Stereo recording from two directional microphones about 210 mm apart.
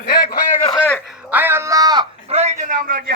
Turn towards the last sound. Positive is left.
turn(degrees=-45)  # may be behind; listen again after turning